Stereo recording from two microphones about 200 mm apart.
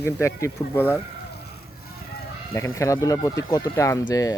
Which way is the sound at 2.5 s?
15° left (ahead or behind).